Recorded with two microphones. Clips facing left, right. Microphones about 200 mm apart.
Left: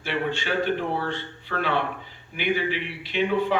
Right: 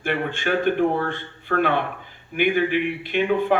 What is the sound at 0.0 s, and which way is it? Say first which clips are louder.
Speech: right 3 dB; 50° right (ahead or behind).